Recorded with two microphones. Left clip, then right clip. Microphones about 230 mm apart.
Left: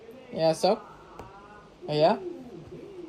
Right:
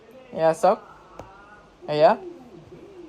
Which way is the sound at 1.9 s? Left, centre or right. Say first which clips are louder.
Right 5 dB; centre.